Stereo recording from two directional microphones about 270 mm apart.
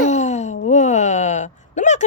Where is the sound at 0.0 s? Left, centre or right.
Left.